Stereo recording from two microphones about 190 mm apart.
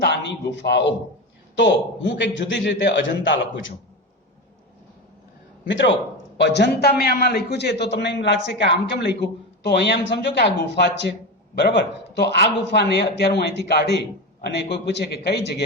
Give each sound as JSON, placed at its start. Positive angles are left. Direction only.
{"t": 0.6, "sound": "a man's voice", "side_deg": 65}
{"t": 5.6, "sound": "a man's voice", "side_deg": 70}